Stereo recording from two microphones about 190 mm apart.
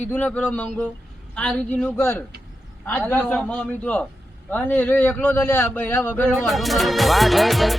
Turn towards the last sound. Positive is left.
turn(degrees=0)  # may be behind; listen again after turning